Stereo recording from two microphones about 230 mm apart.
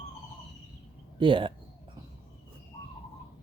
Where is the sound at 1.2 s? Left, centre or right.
Right.